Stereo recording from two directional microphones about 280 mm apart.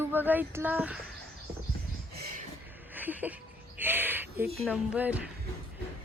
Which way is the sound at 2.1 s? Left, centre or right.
Right.